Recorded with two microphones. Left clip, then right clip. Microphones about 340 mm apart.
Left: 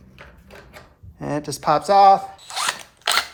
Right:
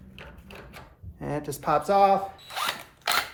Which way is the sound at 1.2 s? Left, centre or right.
Left.